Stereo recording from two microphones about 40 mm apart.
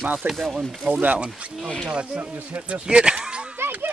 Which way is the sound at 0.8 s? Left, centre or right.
Right.